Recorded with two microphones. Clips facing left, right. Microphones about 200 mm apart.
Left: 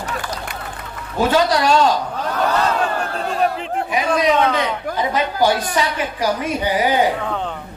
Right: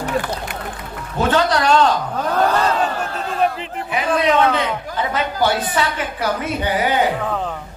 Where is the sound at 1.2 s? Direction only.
10° left (ahead or behind).